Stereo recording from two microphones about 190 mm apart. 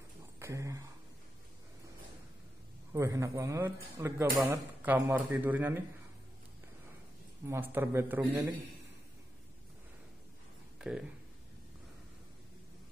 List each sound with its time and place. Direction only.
0.4 s speech: 15° right (ahead or behind)
2.9 s speech: 15° right (ahead or behind)
7.4 s speech: 10° right (ahead or behind)
10.8 s speech: 5° right (ahead or behind)